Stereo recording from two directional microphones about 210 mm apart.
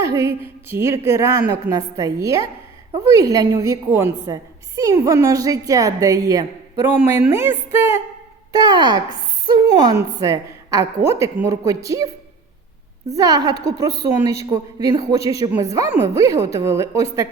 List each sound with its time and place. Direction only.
0.0 s a woman's voice: 15° right (ahead or behind)
13.1 s a woman's voice: 15° right (ahead or behind)